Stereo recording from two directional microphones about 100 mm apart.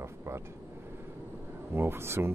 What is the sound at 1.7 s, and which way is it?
Speech, 25° right (ahead or behind).